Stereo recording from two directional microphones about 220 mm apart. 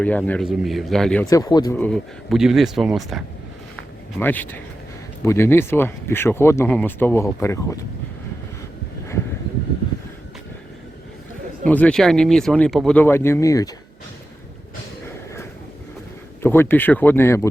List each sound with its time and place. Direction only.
0.0 s speech: 5° left (ahead or behind)
1.3 s speech: 15° left (ahead or behind)
1.7 s speech: 5° left (ahead or behind)
4.2 s speech: 10° left (ahead or behind)
11.6 s speech: 5° left (ahead or behind)
16.4 s speech: 10° left (ahead or behind)